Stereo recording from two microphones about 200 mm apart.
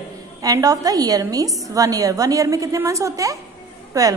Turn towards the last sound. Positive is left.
turn(degrees=-15)  # may be behind; listen again after turning